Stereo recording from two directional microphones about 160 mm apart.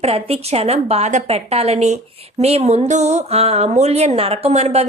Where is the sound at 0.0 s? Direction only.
40° right (ahead or behind).